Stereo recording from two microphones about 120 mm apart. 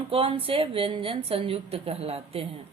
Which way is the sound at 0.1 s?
50° right (ahead or behind).